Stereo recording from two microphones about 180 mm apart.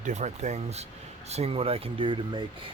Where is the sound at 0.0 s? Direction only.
40° right (ahead or behind).